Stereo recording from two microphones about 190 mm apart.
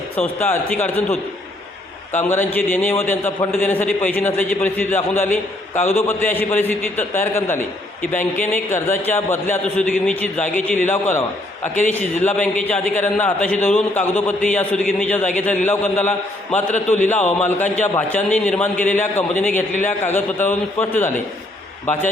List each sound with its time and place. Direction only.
0.2 s a man's voice: 10° left (ahead or behind)
16.7 s a man's voice: 40° left (ahead or behind)
17.1 s a man's voice: 10° left (ahead or behind)